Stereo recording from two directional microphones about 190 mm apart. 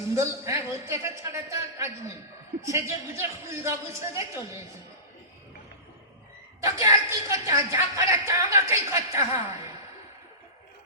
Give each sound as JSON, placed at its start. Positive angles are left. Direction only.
{"t": 0.1, "sound": "a woman's voice", "side_deg": -15}
{"t": 6.6, "sound": "a woman's voice", "side_deg": -15}